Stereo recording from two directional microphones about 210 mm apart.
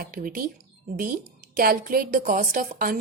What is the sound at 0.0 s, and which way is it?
A woman's voice, 45° right (ahead or behind).